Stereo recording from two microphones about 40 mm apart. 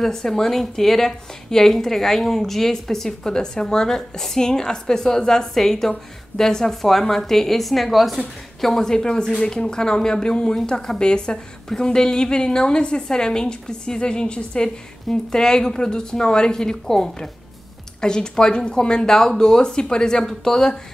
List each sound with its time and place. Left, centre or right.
0.0 s a woman's voice: centre